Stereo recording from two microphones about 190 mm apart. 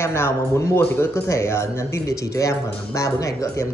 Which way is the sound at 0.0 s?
15° left (ahead or behind).